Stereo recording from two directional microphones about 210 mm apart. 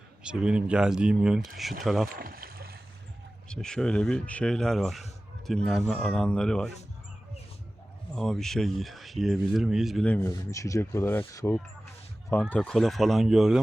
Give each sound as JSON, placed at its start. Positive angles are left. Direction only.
{"t": 0.2, "sound": "speech", "side_deg": -5}
{"t": 2.0, "sound": "speech", "side_deg": -45}
{"t": 3.5, "sound": "speech", "side_deg": 5}
{"t": 8.1, "sound": "speech", "side_deg": 0}